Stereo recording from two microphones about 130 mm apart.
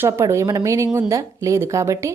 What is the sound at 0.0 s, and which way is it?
A woman's voice, 20° right (ahead or behind).